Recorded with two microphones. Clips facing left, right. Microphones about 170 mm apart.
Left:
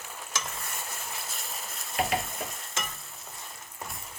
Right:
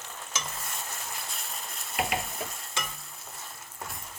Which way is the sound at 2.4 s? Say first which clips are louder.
Even; centre (ahead or behind).